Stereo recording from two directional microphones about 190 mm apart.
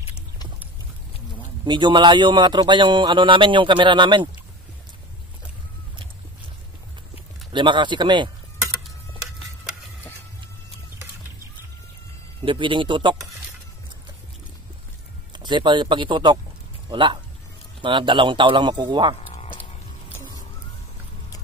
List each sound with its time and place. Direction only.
1.7 s speech: 25° right (ahead or behind)
7.5 s speech: 25° right (ahead or behind)
12.4 s speech: 25° right (ahead or behind)
15.3 s speech: 25° right (ahead or behind)
20.1 s music: 15° left (ahead or behind)